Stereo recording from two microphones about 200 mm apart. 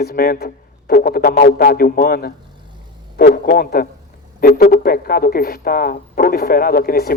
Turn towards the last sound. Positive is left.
turn(degrees=50)  # may be behind; listen again after turning